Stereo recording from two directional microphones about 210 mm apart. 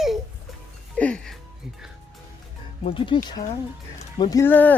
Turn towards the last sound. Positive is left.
turn(degrees=10)  # may be behind; listen again after turning